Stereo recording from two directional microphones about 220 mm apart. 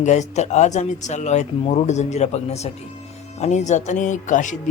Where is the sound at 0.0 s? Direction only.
30° left (ahead or behind).